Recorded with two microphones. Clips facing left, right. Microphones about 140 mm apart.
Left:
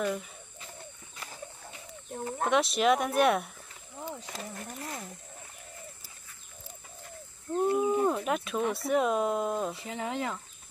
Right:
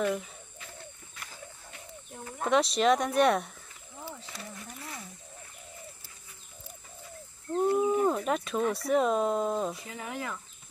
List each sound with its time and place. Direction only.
0.0 s speech: centre (ahead or behind)
2.4 s speech: centre (ahead or behind)
4.0 s a sound: 15° left (ahead or behind)
4.3 s speech: 45° left (ahead or behind)
7.5 s speech: centre (ahead or behind)
9.8 s speech: 25° left (ahead or behind)